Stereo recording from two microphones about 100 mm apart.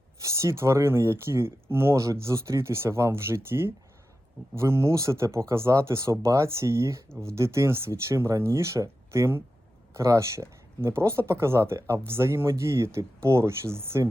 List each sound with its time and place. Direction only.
0.2 s speech: 30° right (ahead or behind)